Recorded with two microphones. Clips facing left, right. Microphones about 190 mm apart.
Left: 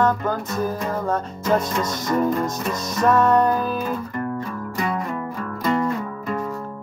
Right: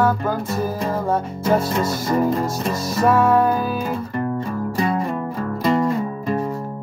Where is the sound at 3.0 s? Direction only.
10° right (ahead or behind).